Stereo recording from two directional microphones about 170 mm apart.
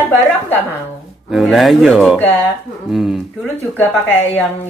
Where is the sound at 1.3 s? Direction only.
Centre (ahead or behind).